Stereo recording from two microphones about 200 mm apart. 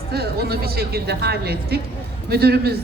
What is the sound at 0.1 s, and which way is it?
A woman's voice, 50° right (ahead or behind).